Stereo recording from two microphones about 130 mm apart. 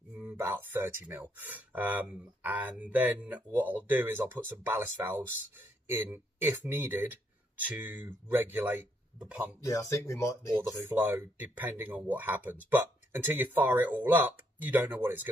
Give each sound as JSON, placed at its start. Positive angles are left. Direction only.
{"t": 0.1, "sound": "speech", "side_deg": -15}
{"t": 9.6, "sound": "speech", "side_deg": 25}
{"t": 10.9, "sound": "speech", "side_deg": -20}